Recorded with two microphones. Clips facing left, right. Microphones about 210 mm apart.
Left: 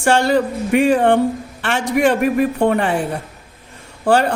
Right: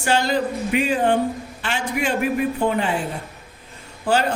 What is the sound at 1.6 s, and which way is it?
A man's voice, 75° left (ahead or behind).